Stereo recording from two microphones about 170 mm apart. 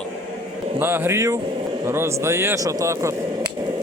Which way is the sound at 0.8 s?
15° right (ahead or behind).